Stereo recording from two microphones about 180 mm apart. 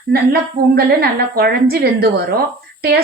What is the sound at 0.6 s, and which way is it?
A woman's voice, 55° right (ahead or behind).